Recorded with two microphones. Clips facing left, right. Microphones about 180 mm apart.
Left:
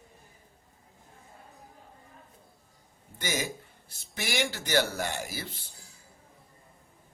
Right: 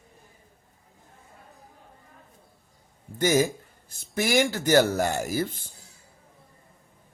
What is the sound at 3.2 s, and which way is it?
Speech, 45° right (ahead or behind).